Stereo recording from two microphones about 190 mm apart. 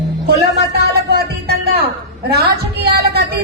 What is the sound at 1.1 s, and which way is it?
Music, 60° right (ahead or behind).